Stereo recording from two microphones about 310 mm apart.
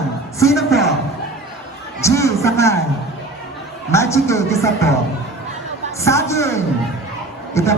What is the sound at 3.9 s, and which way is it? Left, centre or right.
Speech, centre.